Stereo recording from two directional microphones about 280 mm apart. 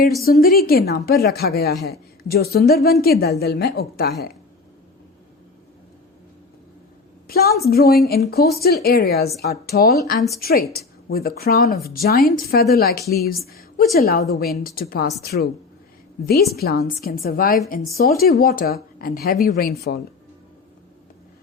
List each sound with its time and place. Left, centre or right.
0.3 s a woman's voice: left
7.3 s a woman's voice: left
16.6 s a woman's voice: left